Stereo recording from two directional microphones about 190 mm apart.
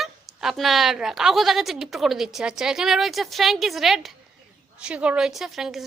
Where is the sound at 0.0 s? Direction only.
Centre (ahead or behind).